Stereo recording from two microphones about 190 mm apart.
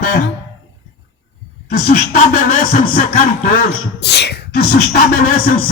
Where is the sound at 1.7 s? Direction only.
55° left (ahead or behind).